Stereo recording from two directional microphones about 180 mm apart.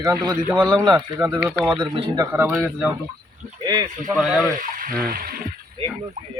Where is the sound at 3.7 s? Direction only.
20° right (ahead or behind).